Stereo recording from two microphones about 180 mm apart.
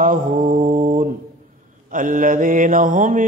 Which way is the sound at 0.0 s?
45° right (ahead or behind).